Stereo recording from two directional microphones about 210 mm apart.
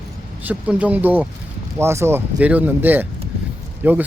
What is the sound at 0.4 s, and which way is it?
Speech, 5° right (ahead or behind).